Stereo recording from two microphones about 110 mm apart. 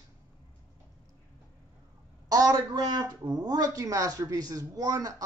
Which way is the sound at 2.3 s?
35° right (ahead or behind).